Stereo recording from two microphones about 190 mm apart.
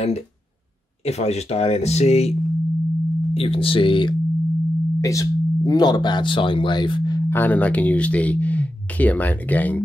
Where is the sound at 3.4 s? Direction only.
30° left (ahead or behind).